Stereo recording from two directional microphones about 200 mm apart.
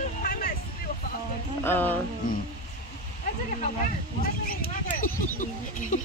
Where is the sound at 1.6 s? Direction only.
10° left (ahead or behind).